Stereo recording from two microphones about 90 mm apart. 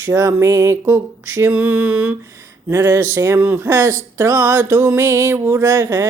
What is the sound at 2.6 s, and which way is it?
Speech, 30° right (ahead or behind).